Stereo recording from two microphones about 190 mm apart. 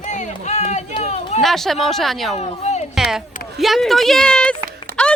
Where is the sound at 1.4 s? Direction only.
Centre (ahead or behind).